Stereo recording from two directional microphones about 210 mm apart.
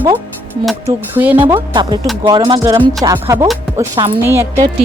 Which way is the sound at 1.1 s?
10° right (ahead or behind).